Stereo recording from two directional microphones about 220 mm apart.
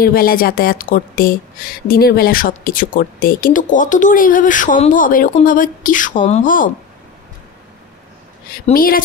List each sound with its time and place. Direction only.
0.0 s speech: 40° left (ahead or behind)
8.6 s speech: 40° left (ahead or behind)